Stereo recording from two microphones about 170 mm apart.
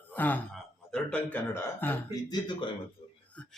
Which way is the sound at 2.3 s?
25° left (ahead or behind).